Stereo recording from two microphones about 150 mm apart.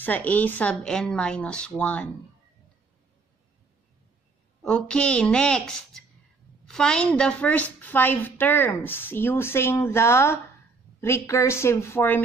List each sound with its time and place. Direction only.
0.0 s a woman's voice: 10° left (ahead or behind)
4.6 s a woman's voice: 5° left (ahead or behind)